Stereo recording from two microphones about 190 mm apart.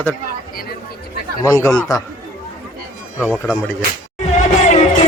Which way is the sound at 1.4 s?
15° left (ahead or behind).